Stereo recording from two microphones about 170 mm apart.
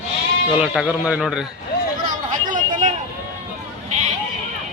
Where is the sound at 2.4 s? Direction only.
50° right (ahead or behind).